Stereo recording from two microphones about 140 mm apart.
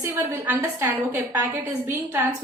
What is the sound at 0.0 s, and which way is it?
A woman's voice, 20° right (ahead or behind).